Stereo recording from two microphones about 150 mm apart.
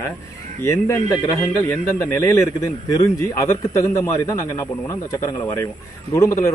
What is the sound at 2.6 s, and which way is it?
A man's voice, 25° left (ahead or behind).